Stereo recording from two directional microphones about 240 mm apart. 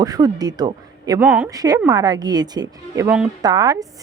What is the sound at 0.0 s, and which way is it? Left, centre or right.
A woman's voice, centre.